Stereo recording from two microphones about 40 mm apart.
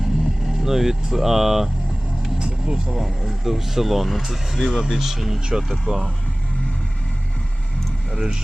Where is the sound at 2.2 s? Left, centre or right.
Centre.